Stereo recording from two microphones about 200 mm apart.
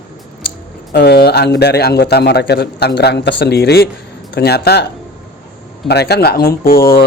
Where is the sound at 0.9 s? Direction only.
50° left (ahead or behind).